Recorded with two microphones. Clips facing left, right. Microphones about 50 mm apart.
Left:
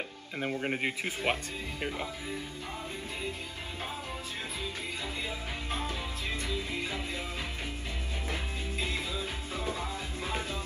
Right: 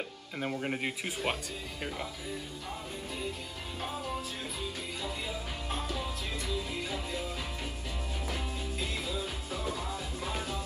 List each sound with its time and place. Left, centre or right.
0.4 s speech: left
5.7 s music: left
8.3 s music: left